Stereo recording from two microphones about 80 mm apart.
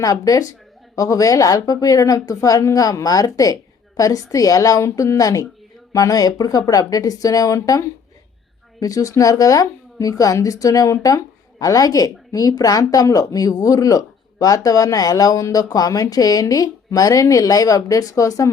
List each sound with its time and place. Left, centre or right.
0.0 s speech: left